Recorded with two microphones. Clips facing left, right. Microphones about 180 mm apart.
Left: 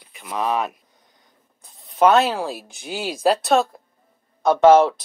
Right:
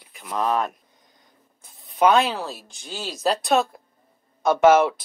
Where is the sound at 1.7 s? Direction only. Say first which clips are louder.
Left 2 dB; centre (ahead or behind).